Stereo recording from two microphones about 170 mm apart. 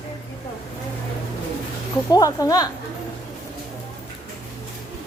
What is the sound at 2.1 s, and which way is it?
Speech, 20° left (ahead or behind).